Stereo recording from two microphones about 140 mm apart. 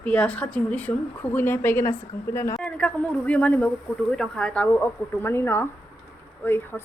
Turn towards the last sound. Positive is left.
turn(degrees=15)  # may be behind; listen again after turning